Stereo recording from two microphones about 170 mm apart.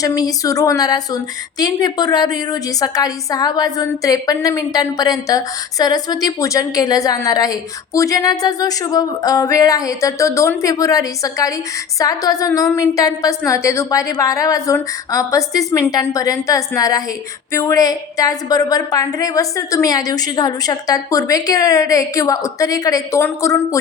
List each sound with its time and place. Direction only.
0.0 s a woman's voice: 20° left (ahead or behind)